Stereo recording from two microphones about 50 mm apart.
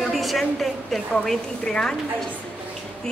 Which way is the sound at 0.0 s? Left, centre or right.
Centre.